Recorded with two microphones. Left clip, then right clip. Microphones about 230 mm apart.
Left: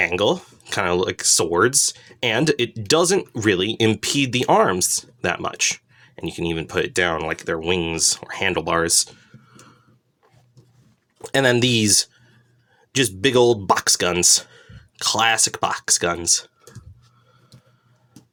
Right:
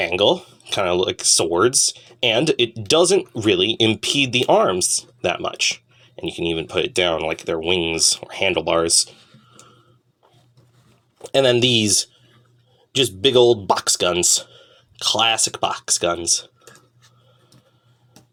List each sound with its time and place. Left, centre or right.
0.0 s speech: left
11.2 s speech: left